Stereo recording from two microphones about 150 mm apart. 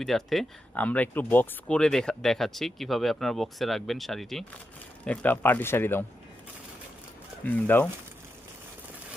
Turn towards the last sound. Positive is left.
turn(degrees=10)  # may be behind; listen again after turning